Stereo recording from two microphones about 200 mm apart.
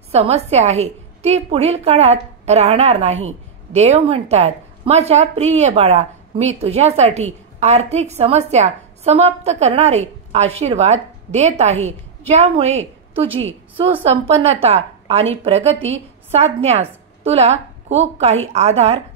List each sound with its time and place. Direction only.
0.1 s a woman's voice: 30° right (ahead or behind)